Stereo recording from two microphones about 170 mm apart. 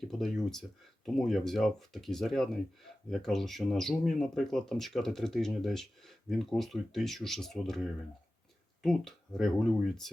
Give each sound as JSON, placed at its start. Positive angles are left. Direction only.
{"t": 0.1, "sound": "speech", "side_deg": 0}